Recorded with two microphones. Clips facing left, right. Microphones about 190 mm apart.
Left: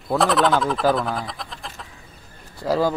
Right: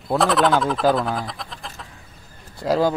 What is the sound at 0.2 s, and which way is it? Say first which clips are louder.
Speech: right 1 dB; centre (ahead or behind).